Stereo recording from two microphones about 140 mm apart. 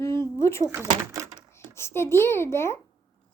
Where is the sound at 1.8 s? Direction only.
20° left (ahead or behind).